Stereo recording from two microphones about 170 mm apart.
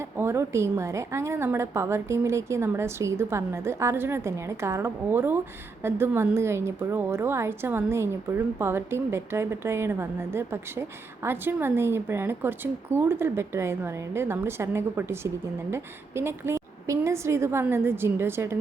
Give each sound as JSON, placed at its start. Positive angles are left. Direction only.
{"t": 0.2, "sound": "a woman's voice", "side_deg": -15}